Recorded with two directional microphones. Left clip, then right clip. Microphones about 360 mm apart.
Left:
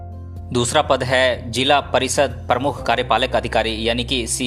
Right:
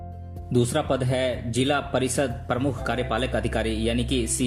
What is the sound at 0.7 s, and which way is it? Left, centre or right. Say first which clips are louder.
Speech: left 9 dB; centre.